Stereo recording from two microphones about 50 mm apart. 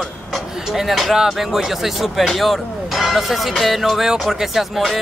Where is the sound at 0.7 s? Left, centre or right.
Centre.